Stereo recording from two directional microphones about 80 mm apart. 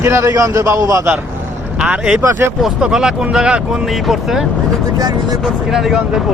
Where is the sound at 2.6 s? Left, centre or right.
Centre.